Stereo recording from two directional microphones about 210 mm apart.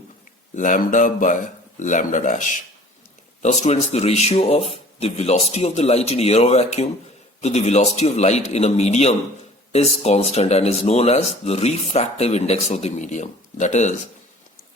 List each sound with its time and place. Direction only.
0.5 s speech: 40° left (ahead or behind)